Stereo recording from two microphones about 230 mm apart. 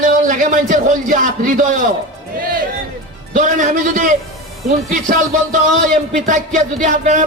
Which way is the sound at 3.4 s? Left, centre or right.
Right.